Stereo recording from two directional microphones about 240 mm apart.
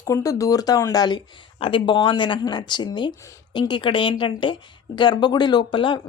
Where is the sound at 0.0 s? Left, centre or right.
Centre.